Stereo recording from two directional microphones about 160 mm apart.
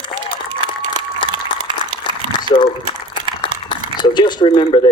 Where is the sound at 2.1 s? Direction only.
30° left (ahead or behind).